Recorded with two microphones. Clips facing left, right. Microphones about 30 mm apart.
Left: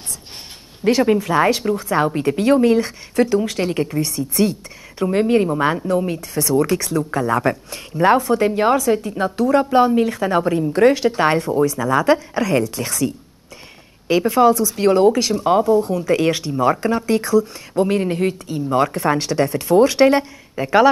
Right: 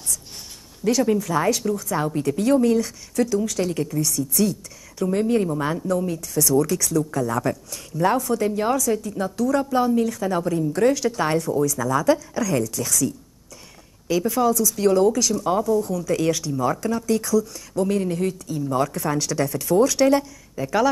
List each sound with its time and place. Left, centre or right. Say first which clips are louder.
0.8 s speech: left 4 dB; left